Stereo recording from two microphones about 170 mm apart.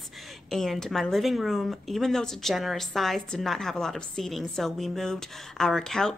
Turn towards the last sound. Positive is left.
turn(degrees=5)  # may be behind; listen again after turning